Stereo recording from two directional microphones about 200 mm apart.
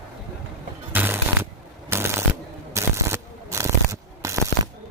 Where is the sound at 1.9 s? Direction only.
10° right (ahead or behind).